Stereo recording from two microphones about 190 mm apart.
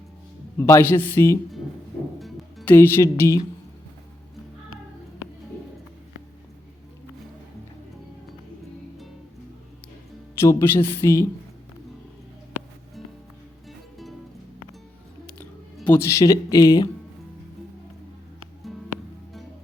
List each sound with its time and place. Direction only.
0.6 s speech: 10° left (ahead or behind)
2.1 s music: centre (ahead or behind)
2.7 s speech: 15° left (ahead or behind)
10.3 s speech: 15° left (ahead or behind)
13.7 s music: centre (ahead or behind)
15.4 s speech: 10° left (ahead or behind)